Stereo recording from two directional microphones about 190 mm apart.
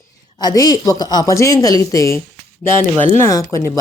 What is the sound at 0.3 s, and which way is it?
Speech, 20° left (ahead or behind).